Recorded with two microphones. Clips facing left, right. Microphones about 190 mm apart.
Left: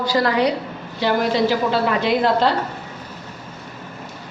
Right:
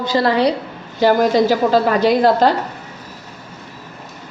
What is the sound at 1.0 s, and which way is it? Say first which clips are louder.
A woman's voice: right 5 dB; 45° right (ahead or behind).